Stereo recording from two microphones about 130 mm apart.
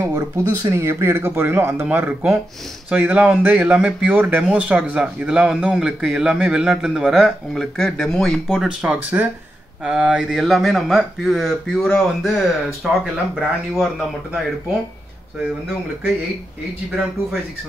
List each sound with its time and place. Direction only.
0.0 s speech: 20° right (ahead or behind); by 13.8 s centre (ahead or behind)